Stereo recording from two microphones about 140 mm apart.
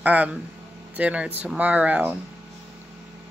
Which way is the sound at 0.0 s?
10° right (ahead or behind).